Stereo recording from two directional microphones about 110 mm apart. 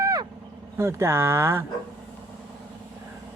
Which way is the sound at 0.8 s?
25° right (ahead or behind).